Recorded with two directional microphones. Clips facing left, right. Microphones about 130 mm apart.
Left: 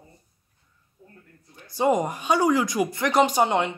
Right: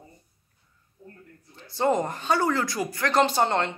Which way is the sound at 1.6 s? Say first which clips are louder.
Left 2 dB; 10° left (ahead or behind).